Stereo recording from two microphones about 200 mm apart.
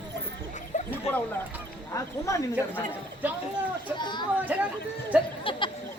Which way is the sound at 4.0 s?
20° left (ahead or behind).